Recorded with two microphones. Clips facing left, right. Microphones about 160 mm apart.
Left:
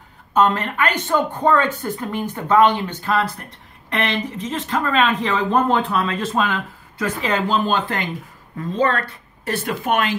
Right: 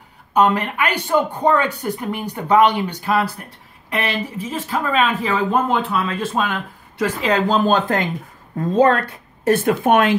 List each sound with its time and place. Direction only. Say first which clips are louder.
0.3 s speech: right 1 dB; 10° right (ahead or behind)
7.2 s speech: right 3 dB; 40° right (ahead or behind)